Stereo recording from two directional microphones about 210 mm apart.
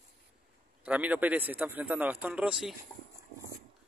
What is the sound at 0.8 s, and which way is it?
Speech, 5° right (ahead or behind).